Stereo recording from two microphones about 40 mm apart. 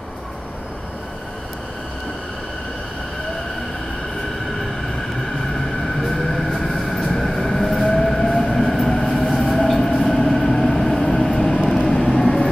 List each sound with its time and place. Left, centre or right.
5.5 s train: centre
11.9 s vehicle: centre